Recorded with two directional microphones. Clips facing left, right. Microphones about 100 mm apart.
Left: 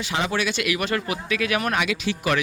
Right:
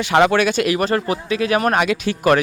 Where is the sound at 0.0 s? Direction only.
65° right (ahead or behind).